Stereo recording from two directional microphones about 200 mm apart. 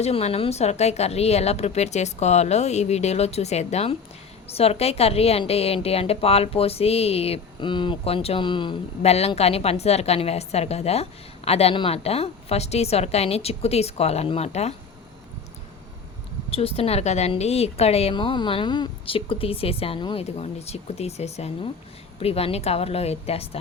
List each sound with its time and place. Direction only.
0.0 s a woman's voice: 30° left (ahead or behind)
16.5 s a woman's voice: 30° left (ahead or behind)